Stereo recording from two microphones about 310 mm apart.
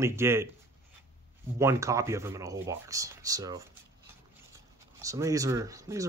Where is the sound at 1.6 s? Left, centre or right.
Centre.